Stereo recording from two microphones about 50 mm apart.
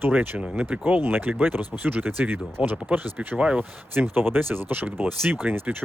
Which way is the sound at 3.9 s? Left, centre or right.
Right.